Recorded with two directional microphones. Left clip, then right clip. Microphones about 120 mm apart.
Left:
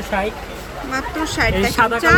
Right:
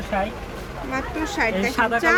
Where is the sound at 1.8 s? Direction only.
40° left (ahead or behind).